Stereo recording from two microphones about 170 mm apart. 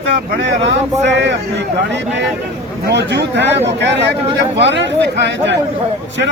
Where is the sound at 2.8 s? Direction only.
85° right.